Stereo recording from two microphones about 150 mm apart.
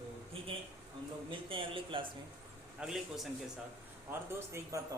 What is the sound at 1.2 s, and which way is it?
Speech, 35° right (ahead or behind).